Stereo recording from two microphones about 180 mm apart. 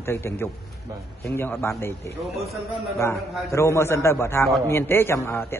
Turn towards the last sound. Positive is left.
turn(degrees=15)  # may be behind; listen again after turning